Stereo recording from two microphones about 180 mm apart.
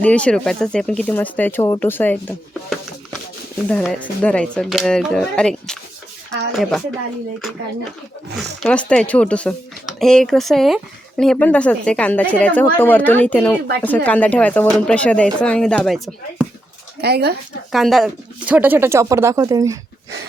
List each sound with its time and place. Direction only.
0.0 s speech: 5° left (ahead or behind)
8.4 s speech: 5° left (ahead or behind)
17.0 s speech: 65° right (ahead or behind)
17.7 s speech: centre (ahead or behind); by 19.8 s 20° right (ahead or behind)